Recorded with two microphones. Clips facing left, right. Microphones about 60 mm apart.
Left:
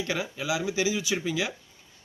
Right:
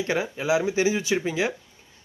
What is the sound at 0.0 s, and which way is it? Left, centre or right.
Speech, right.